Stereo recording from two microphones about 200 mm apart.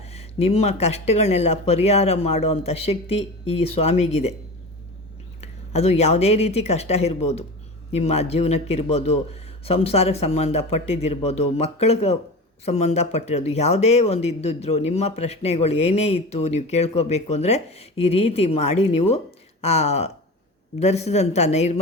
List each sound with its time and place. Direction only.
0.0 s speech: 30° left (ahead or behind)
5.4 s speech: 30° left (ahead or behind)